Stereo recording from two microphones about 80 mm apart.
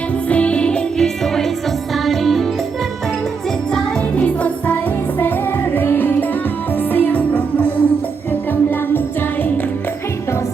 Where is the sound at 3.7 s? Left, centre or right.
Centre.